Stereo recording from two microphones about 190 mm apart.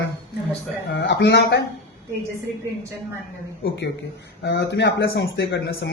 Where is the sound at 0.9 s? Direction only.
60° left (ahead or behind).